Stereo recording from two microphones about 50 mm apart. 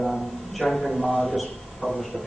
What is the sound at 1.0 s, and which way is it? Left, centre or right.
Speech, centre.